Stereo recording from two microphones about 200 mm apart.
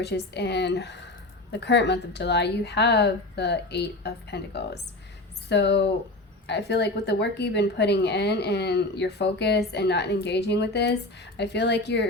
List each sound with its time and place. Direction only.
0.0 s a woman's voice: 55° left (ahead or behind)